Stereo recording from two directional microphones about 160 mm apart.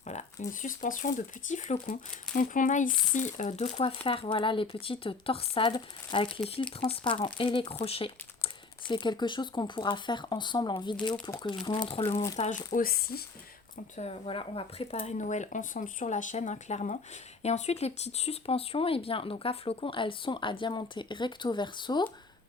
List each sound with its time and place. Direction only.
0.0 s speech: 45° left (ahead or behind); by 12.0 s 30° left (ahead or behind)
12.4 s speech: 50° left (ahead or behind); by 13.2 s 65° left (ahead or behind)
13.9 s speech: 40° left (ahead or behind)